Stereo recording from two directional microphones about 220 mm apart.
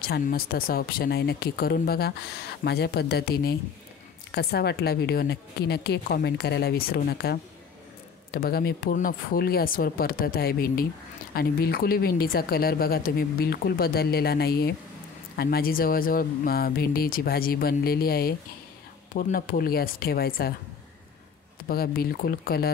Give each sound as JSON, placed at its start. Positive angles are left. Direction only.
{"t": 0.0, "sound": "speech", "side_deg": 45}
{"t": 21.6, "sound": "speech", "side_deg": 40}